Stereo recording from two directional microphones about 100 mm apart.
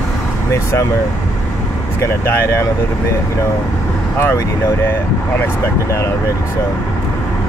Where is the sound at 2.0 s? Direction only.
25° left (ahead or behind).